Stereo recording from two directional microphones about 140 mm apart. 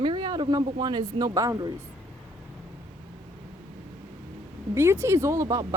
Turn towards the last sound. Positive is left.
turn(degrees=-25)  # may be behind; listen again after turning